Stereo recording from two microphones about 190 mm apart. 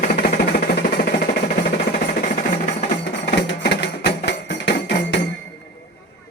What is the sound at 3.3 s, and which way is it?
Music, 65° left (ahead or behind).